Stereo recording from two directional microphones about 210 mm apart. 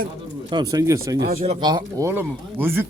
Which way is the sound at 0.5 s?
15° right (ahead or behind).